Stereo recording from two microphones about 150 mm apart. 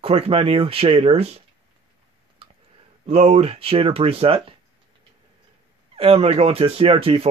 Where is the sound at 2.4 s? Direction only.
40° right (ahead or behind).